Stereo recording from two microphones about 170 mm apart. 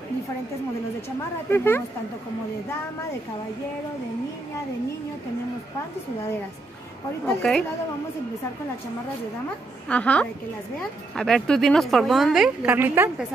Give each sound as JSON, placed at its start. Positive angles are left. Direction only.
{"t": 1.5, "sound": "a woman's voice", "side_deg": 15}
{"t": 7.2, "sound": "a woman's voice", "side_deg": 5}
{"t": 9.8, "sound": "a woman's voice", "side_deg": 5}